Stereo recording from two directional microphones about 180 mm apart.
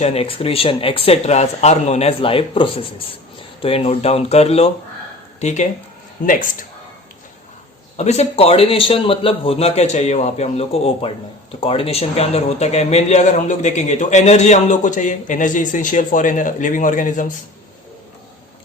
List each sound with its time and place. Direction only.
0.0 s a man's voice: 35° left (ahead or behind)
7.9 s a man's voice: 40° left (ahead or behind)